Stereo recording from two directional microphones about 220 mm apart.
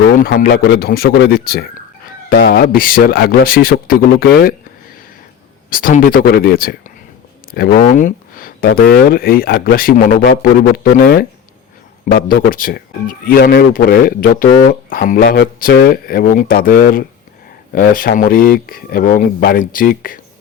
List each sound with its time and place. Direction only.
0.1 s speech: 40° left (ahead or behind)
5.7 s speech: 40° left (ahead or behind)